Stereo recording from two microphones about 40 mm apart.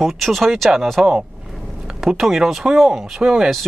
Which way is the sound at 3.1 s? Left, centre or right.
Centre.